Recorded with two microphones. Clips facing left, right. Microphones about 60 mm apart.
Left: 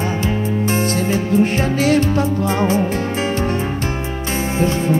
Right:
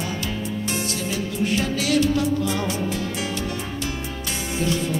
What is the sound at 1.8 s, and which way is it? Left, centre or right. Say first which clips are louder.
Music: left 5 dB; left.